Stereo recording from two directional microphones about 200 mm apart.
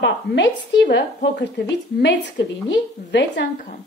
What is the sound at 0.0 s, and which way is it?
A woman's voice, 60° left (ahead or behind).